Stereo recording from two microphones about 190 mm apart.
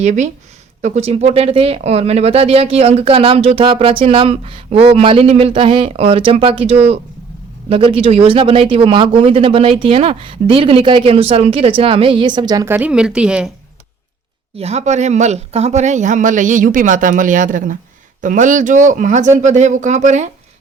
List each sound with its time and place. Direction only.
0.0 s speech: 40° right (ahead or behind); by 13.5 s 5° right (ahead or behind)
14.6 s speech: 35° right (ahead or behind)